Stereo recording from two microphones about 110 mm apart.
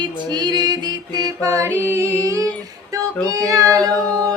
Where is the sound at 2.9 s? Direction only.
30° right (ahead or behind).